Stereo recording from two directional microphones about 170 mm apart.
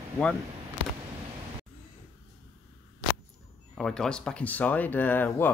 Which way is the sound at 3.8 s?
5° left (ahead or behind).